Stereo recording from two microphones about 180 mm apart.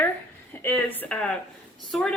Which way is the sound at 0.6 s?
15° left (ahead or behind).